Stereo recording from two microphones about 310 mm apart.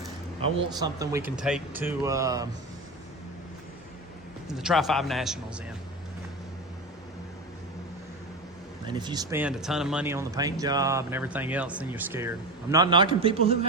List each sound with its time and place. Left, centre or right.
0.4 s speech: centre
4.5 s a man's voice: centre
8.9 s speech: centre